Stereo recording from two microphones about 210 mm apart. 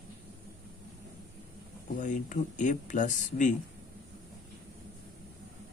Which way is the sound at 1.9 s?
40° left (ahead or behind).